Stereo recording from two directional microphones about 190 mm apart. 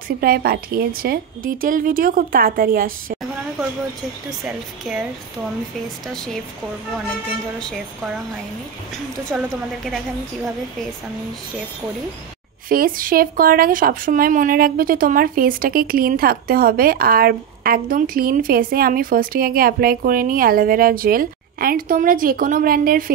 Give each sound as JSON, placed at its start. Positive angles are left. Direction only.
{"t": 0.2, "sound": "speech", "side_deg": -50}
{"t": 4.9, "sound": "speech", "side_deg": 0}
{"t": 9.3, "sound": "speech", "side_deg": -5}
{"t": 12.6, "sound": "speech", "side_deg": -50}